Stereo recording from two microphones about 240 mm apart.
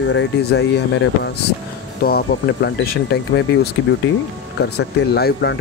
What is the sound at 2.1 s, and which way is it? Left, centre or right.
Speech, left.